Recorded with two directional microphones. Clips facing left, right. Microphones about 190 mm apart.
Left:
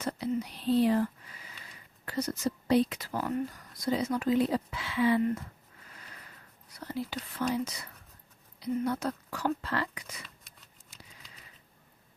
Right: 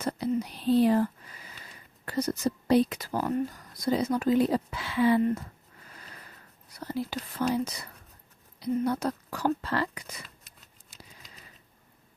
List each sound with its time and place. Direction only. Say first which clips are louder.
0.0 s speech: right 3 dB; 40° right (ahead or behind)
2.0 s speech: right 3 dB; 40° right (ahead or behind)
6.7 s speech: right 3 dB; 40° right (ahead or behind)